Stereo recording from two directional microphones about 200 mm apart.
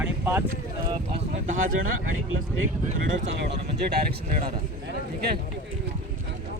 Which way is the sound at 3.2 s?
60° right (ahead or behind).